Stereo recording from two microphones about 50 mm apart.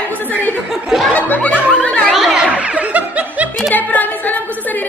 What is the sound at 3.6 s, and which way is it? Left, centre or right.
Music, left.